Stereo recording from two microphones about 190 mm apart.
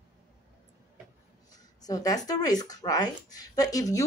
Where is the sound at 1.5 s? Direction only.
20° left (ahead or behind).